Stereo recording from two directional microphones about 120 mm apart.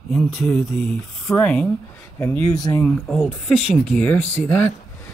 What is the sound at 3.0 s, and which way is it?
Speech, centre (ahead or behind).